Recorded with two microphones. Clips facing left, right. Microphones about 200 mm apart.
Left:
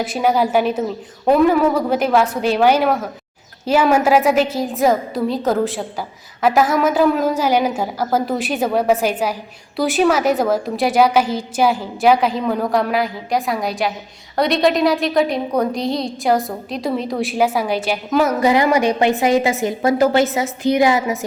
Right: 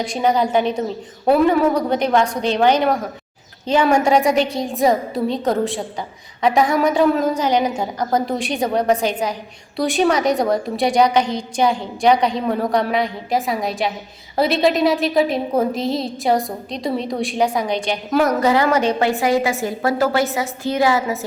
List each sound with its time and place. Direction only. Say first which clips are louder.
0.0 s a woman's voice: left 1 dB; 5° left (ahead or behind)
18.4 s a woman's voice: left 1 dB; 15° left (ahead or behind)